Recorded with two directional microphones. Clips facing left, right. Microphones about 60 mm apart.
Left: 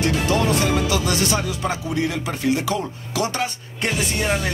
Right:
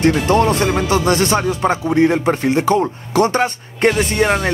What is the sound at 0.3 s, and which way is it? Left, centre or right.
Speech, right.